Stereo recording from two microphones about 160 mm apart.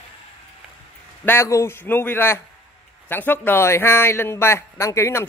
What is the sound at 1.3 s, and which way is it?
A man's voice, 15° left (ahead or behind).